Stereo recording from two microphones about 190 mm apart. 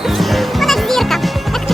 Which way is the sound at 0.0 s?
Centre (ahead or behind).